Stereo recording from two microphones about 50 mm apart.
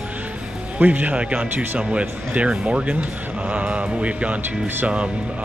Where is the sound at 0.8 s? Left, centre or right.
Right.